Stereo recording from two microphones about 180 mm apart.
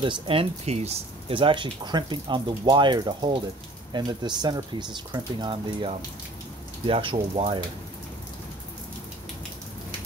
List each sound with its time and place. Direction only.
0.0 s speech: 30° right (ahead or behind)